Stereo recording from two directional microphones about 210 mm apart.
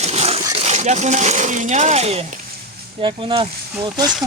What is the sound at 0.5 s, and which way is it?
Speech, 30° right (ahead or behind).